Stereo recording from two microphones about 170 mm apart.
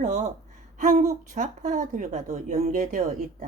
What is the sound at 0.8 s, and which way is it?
A woman's voice, 45° right (ahead or behind).